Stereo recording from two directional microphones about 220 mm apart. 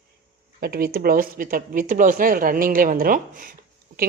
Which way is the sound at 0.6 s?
45° right (ahead or behind).